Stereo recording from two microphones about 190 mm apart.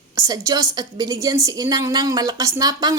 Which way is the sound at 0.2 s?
20° right (ahead or behind).